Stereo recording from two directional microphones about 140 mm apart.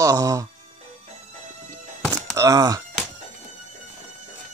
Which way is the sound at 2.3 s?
25° right (ahead or behind).